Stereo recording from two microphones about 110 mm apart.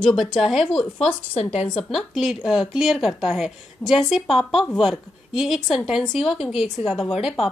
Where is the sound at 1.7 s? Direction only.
5° left (ahead or behind).